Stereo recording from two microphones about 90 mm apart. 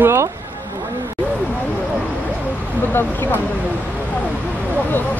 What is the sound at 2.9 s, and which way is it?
Speech, 25° left (ahead or behind).